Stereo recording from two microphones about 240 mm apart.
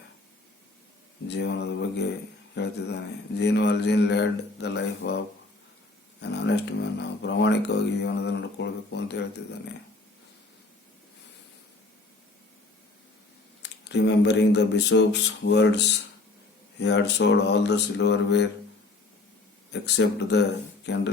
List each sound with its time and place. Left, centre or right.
1.3 s a man's voice: left
7.0 s a man's voice: left
13.6 s a man's voice: left
19.7 s a man's voice: left